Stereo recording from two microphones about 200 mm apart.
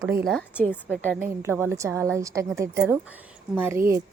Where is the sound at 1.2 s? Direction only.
10° right (ahead or behind).